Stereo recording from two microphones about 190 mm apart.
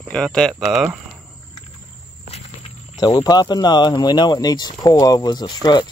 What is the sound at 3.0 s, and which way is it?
Speech, 20° left (ahead or behind).